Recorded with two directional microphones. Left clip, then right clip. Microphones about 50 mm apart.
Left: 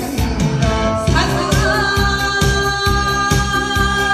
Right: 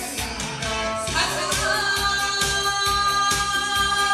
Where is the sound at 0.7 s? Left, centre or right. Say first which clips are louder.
Left 7 dB; right.